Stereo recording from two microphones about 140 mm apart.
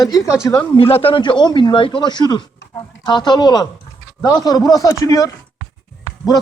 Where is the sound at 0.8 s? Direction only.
40° left (ahead or behind).